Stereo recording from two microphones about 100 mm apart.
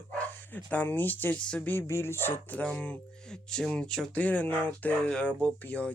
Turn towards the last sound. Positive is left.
turn(degrees=15)  # may be behind; listen again after turning